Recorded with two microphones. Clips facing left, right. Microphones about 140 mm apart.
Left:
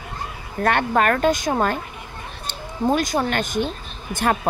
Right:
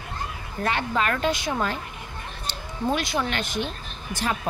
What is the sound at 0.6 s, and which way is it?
A woman's voice, 55° left (ahead or behind).